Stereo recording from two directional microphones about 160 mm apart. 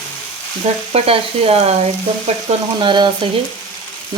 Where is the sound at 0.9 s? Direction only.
35° right (ahead or behind).